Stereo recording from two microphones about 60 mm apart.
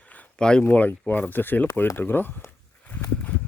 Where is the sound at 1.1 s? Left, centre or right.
Left.